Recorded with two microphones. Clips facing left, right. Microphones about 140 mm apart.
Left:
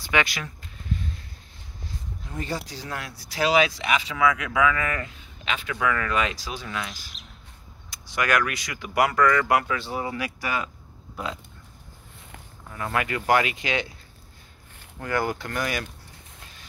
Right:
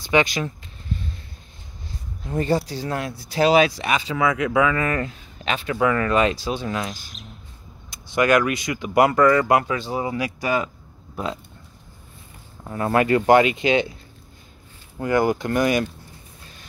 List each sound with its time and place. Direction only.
0.1 s speech: 25° right (ahead or behind)
2.3 s speech: 55° right (ahead or behind)
2.9 s speech: 25° right (ahead or behind)
3.3 s speech: 40° right (ahead or behind)
7.9 s speech: 25° right (ahead or behind)
12.6 s speech: 35° right (ahead or behind)
15.0 s speech: 20° right (ahead or behind)